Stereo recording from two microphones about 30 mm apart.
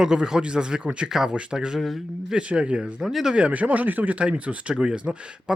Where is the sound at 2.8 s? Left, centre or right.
Right.